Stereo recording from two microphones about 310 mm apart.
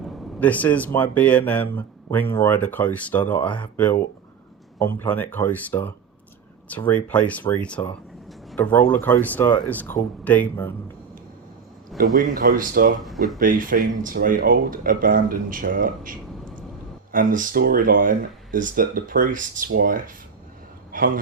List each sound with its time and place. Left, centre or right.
0.3 s speech: centre
11.9 s speech: right
20.9 s a sound: right